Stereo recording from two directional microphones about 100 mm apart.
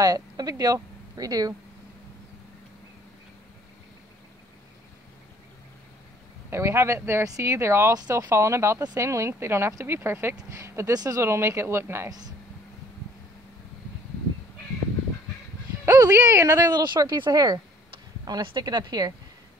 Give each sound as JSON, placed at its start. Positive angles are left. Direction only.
{"t": 0.0, "sound": "speech", "side_deg": -35}
{"t": 6.5, "sound": "speech", "side_deg": -25}
{"t": 7.9, "sound": "speech", "side_deg": -40}
{"t": 8.3, "sound": "speech", "side_deg": -30}
{"t": 10.3, "sound": "speech", "side_deg": -35}
{"t": 15.8, "sound": "speech", "side_deg": -30}